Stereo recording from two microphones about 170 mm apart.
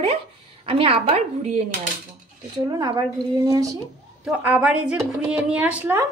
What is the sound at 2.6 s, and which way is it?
Speech, 20° right (ahead or behind).